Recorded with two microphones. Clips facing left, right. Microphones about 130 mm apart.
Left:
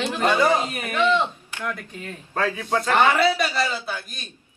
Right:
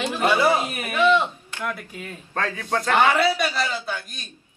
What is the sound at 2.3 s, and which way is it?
Speech, 10° left (ahead or behind).